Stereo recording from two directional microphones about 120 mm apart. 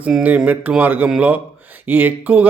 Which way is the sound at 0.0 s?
10° right (ahead or behind).